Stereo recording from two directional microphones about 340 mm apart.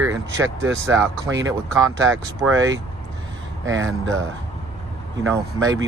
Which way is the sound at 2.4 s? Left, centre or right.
Centre.